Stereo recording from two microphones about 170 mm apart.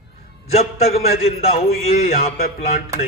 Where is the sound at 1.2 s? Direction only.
35° left (ahead or behind).